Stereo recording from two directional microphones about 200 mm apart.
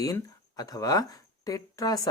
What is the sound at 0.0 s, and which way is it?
Speech, 20° left (ahead or behind).